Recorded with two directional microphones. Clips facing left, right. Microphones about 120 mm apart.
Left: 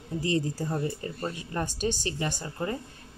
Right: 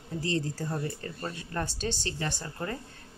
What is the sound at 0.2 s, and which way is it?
Speech, 15° left (ahead or behind).